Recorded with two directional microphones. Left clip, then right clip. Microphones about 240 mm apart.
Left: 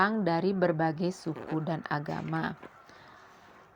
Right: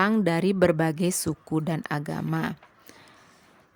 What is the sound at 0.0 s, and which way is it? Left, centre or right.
A woman's voice, right.